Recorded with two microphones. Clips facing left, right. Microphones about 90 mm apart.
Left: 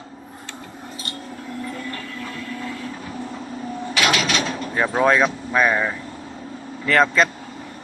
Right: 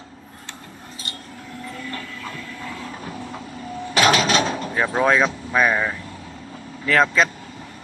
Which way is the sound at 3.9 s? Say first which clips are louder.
Right 4 dB; 40° right (ahead or behind).